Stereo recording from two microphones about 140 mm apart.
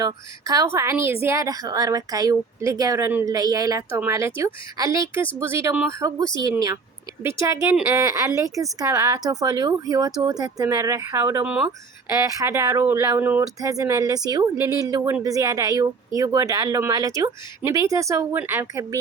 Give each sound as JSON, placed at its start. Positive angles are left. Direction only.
{"t": 0.0, "sound": "a woman's voice", "side_deg": -25}
{"t": 13.4, "sound": "a woman's voice", "side_deg": -25}